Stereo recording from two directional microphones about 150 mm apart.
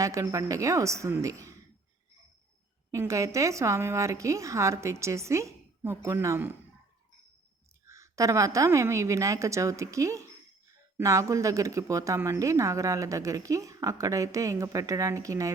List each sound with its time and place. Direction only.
0.0 s speech: 20° right (ahead or behind)
2.9 s speech: 20° right (ahead or behind)
7.9 s speech: 20° right (ahead or behind)